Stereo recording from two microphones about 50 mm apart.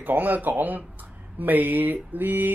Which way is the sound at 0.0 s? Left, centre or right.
Right.